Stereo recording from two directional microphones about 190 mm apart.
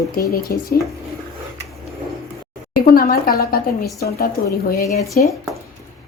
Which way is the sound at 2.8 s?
50° left (ahead or behind).